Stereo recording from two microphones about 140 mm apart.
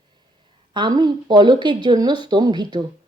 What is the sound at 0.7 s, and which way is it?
A woman's voice, 30° right (ahead or behind).